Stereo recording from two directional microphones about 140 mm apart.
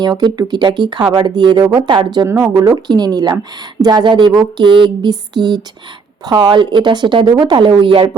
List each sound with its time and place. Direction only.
0.0 s speech: 30° right (ahead or behind)
2.1 s speech: 20° right (ahead or behind)